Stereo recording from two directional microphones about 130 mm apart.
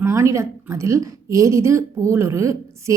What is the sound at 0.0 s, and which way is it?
Speech, 20° right (ahead or behind).